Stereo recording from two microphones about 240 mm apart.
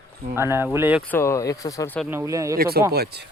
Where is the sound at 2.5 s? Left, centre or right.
Right.